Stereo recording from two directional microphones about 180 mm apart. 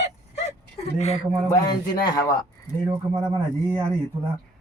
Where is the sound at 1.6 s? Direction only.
20° left (ahead or behind).